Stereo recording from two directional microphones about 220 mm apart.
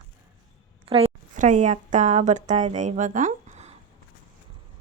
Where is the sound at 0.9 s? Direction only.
25° right (ahead or behind).